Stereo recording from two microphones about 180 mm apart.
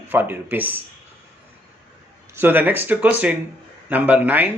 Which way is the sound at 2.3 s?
10° right (ahead or behind).